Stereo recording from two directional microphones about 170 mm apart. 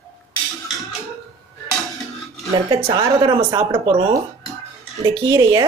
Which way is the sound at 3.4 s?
15° right (ahead or behind).